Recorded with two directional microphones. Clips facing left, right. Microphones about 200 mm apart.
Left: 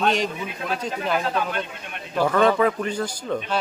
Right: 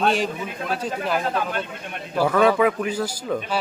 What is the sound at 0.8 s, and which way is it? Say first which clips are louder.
Speech: even; 5° right (ahead or behind).